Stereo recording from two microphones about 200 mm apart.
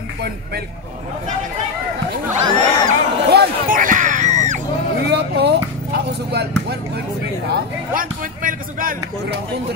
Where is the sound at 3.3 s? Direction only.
50° right (ahead or behind).